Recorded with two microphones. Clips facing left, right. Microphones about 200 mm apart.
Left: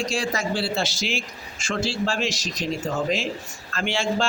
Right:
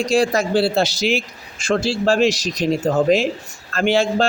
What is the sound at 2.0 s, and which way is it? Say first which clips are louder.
Speech: right 9 dB; 60° right (ahead or behind).